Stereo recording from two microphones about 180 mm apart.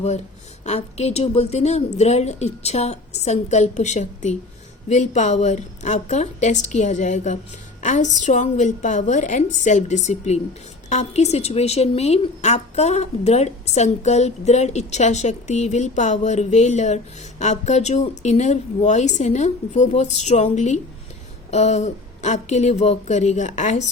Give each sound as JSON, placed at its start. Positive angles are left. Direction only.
{"t": 0.6, "sound": "a woman's voice", "side_deg": 40}